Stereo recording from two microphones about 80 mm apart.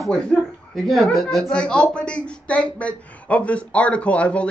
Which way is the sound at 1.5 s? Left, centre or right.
Centre.